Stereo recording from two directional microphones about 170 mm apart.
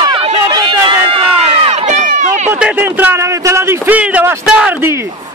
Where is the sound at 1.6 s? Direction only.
40° right (ahead or behind).